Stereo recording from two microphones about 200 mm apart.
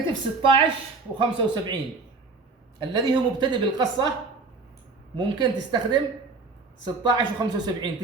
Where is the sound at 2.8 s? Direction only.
25° right (ahead or behind).